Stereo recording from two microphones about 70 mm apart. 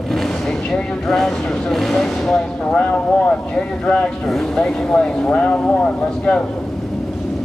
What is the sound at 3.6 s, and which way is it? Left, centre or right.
Speech, centre.